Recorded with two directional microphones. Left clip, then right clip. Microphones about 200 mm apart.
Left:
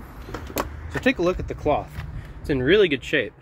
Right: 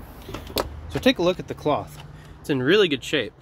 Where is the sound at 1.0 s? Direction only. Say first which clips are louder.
Right 1 dB; 20° right (ahead or behind).